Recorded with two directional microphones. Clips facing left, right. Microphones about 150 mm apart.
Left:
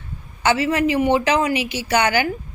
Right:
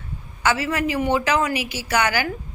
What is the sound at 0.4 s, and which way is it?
Speech, 25° left (ahead or behind).